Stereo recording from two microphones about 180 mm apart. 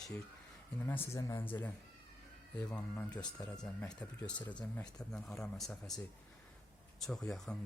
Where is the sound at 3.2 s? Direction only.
20° left (ahead or behind).